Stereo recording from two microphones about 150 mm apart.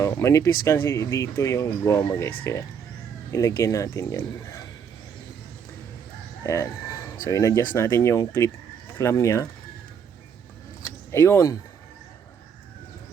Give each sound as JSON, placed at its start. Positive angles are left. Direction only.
{"t": 0.0, "sound": "speech", "side_deg": 20}
{"t": 6.4, "sound": "speech", "side_deg": 20}
{"t": 11.1, "sound": "speech", "side_deg": 15}